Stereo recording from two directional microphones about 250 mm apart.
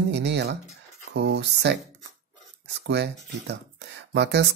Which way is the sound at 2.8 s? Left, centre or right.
Right.